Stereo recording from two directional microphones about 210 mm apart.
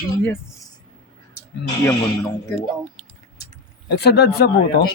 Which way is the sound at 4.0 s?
50° left (ahead or behind).